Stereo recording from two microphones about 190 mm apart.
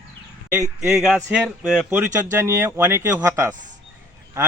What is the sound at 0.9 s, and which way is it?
A man's voice, 5° right (ahead or behind).